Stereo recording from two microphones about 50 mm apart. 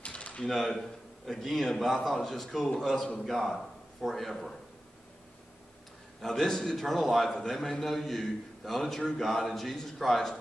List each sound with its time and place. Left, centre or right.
0.0 s a sound: left
0.5 s a man's voice: centre
6.2 s a man's voice: centre